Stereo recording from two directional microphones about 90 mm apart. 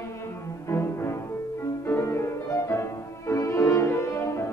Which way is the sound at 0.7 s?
30° left (ahead or behind).